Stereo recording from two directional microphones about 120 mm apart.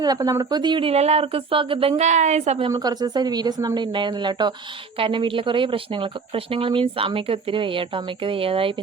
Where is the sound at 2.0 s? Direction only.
75° right (ahead or behind).